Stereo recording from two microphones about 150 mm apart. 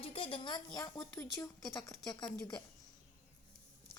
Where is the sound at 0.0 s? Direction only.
35° left (ahead or behind).